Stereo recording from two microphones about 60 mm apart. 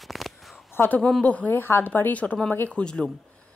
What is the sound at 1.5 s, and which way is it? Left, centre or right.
Speech, left.